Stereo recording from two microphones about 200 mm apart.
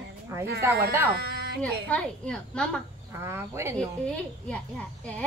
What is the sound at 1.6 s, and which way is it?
A woman's voice, 5° left (ahead or behind).